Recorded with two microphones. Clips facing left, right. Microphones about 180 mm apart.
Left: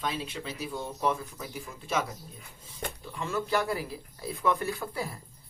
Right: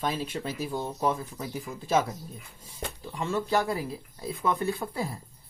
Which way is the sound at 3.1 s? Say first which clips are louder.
Right 3 dB; 30° right (ahead or behind).